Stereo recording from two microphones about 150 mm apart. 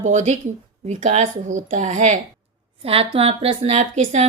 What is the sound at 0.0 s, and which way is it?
Speech, 55° right (ahead or behind).